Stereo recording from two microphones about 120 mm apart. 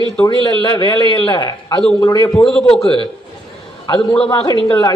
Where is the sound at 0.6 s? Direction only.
40° left (ahead or behind).